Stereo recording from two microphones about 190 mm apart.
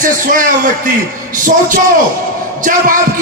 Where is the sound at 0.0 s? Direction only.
45° right (ahead or behind).